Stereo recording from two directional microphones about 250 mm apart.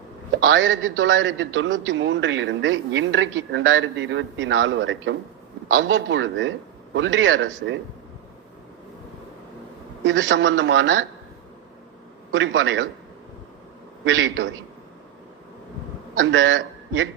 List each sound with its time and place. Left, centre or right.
0.3 s a man's voice: right
10.0 s a man's voice: right
12.3 s a man's voice: right
14.0 s a man's voice: right
16.1 s a man's voice: right